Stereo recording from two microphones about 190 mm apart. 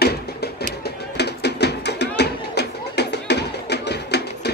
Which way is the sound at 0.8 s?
60° left (ahead or behind).